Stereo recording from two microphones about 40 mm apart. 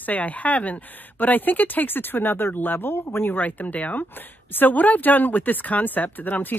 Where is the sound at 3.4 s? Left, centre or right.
Left.